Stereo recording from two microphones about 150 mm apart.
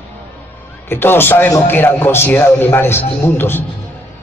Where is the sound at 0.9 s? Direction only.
15° left (ahead or behind).